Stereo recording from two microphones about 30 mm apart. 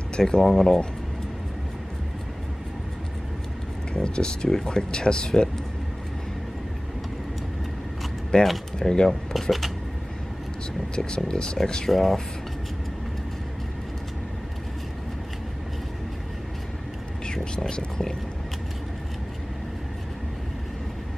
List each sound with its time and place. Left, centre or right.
0.4 s speech: centre
3.9 s speech: left
8.3 s speech: left
9.3 s speech: centre
11.1 s speech: left
11.9 s speech: centre
17.6 s speech: left